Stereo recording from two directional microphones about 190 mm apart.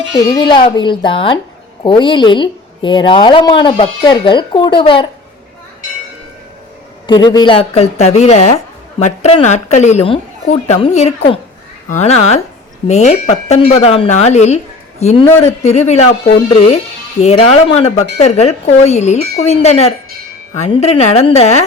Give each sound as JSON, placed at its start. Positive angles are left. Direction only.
{"t": 0.3, "sound": "a woman's voice", "side_deg": 25}
{"t": 7.1, "sound": "a woman's voice", "side_deg": 25}